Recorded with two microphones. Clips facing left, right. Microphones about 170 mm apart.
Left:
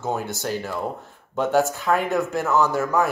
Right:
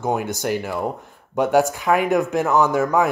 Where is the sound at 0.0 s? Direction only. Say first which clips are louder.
Right 4 dB; 15° right (ahead or behind).